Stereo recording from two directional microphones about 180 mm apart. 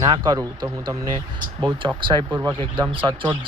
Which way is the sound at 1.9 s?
25° right (ahead or behind).